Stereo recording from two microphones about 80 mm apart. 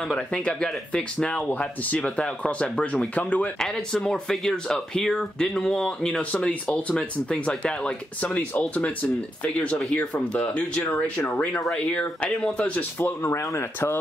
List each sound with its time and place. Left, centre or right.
0.1 s speech: centre
3.5 s speech: centre
13.0 s speech: left